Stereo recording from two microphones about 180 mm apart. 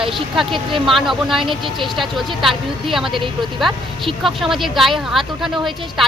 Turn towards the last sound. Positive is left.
turn(degrees=0)  # may be behind; listen again after turning